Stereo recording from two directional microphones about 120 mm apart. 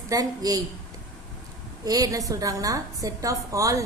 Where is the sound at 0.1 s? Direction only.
30° right (ahead or behind).